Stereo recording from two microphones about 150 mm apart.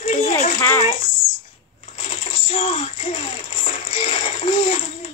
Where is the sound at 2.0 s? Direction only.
40° left (ahead or behind).